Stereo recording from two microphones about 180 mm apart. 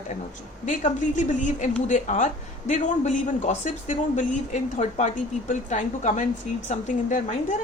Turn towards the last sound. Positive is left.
turn(degrees=45)  # may be behind; listen again after turning